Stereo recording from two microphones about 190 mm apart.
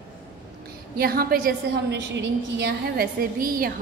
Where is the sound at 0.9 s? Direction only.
50° right (ahead or behind).